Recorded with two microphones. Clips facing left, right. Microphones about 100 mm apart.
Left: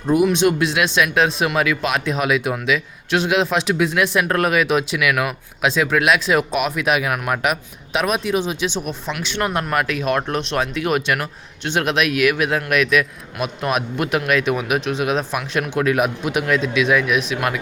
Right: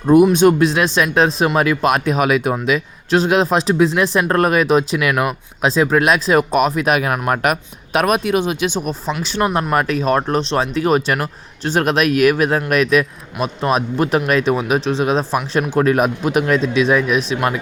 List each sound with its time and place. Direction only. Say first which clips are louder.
0.3 s speech: right 5 dB; 40° right (ahead or behind)
9.4 s speech: right 4 dB; 30° right (ahead or behind)